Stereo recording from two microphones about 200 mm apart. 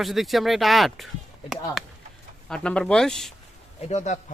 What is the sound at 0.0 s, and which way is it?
Speech, centre (ahead or behind).